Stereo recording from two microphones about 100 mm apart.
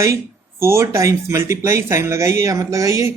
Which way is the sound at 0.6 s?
25° right (ahead or behind).